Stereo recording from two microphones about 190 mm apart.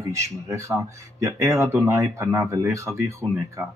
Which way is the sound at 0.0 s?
15° right (ahead or behind).